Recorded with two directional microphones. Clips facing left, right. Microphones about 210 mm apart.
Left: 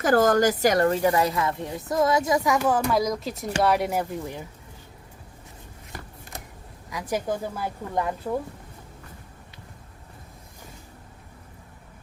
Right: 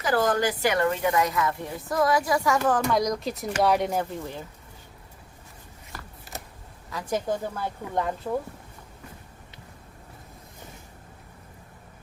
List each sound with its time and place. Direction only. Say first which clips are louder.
0.0 s a woman's voice: left 5 dB; 45° left (ahead or behind); by 4.4 s 10° left (ahead or behind)
5.9 s shuffling cards: left 2 dB; 20° left (ahead or behind)
6.9 s speech: even; 10° left (ahead or behind)